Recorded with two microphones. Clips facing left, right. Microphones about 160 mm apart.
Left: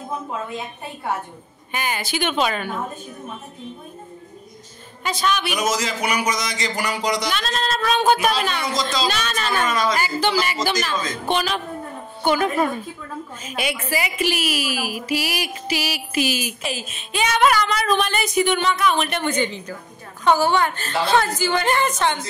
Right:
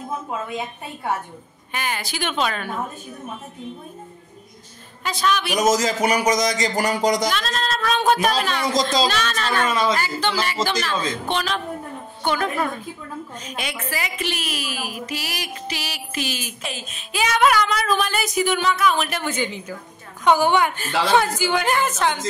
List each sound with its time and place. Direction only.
1.7 s a woman's voice: centre (ahead or behind)
5.0 s a woman's voice: centre (ahead or behind)
5.5 s speech: 45° right (ahead or behind)
7.2 s a woman's voice: centre (ahead or behind)
9.7 s speech: 25° right (ahead or behind)
9.9 s a woman's voice: 10° left (ahead or behind); by 22.2 s 5° right (ahead or behind)